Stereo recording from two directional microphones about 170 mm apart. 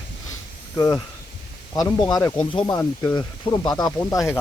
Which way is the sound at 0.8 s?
20° left (ahead or behind).